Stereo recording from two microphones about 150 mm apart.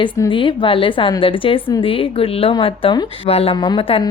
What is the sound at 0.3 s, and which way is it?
A woman's voice, 35° left (ahead or behind).